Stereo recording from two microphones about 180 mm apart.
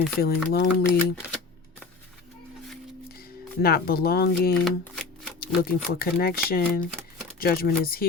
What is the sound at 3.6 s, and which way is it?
Speech, 60° left (ahead or behind).